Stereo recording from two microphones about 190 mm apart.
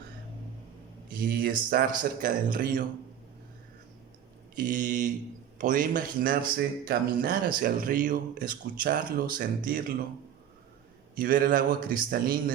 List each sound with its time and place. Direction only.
1.2 s speech: 50° right (ahead or behind)
4.5 s speech: 45° right (ahead or behind)
11.2 s speech: 50° right (ahead or behind)